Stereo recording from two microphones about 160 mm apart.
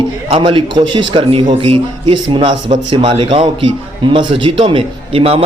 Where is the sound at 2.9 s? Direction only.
35° right (ahead or behind).